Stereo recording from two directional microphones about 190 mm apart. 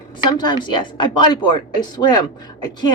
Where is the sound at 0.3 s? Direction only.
20° left (ahead or behind).